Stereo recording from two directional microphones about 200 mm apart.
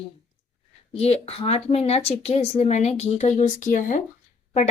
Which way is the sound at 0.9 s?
30° left (ahead or behind).